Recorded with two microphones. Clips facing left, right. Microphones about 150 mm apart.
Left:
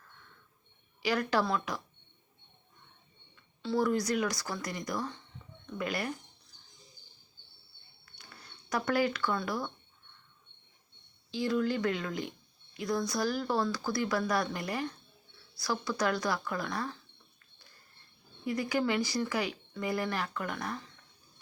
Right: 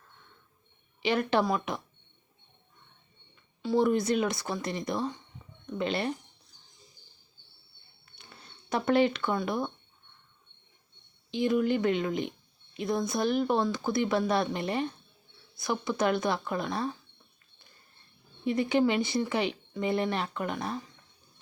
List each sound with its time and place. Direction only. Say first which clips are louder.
1.0 s speech: right 3 dB; 25° right (ahead or behind)
3.6 s speech: right 4 dB; 20° right (ahead or behind)
8.2 s speech: right 1 dB; 25° right (ahead or behind)
11.3 s speech: right 4 dB; 20° right (ahead or behind)
18.4 s speech: right 5 dB; 25° right (ahead or behind)